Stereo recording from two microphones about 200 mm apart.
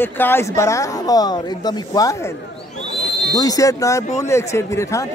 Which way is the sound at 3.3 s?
20° left (ahead or behind).